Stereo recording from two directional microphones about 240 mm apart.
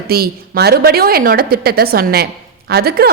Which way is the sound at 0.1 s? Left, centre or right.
Right.